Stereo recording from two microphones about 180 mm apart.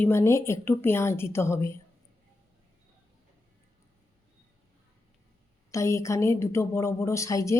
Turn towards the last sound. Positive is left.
turn(degrees=15)  # may be behind; listen again after turning